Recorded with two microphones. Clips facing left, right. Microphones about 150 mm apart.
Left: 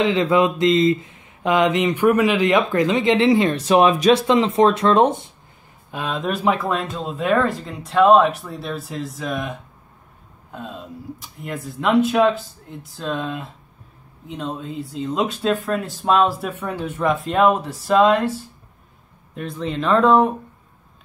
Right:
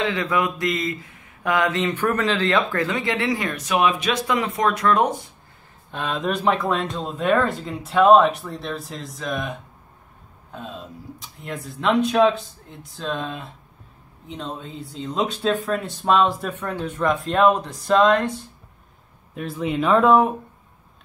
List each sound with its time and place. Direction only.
0.0 s speech: 25° left (ahead or behind)
5.9 s speech: centre (ahead or behind)
19.3 s speech: 5° right (ahead or behind)